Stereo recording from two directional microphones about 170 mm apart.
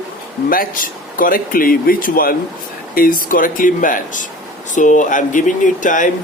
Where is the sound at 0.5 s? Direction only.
55° left (ahead or behind).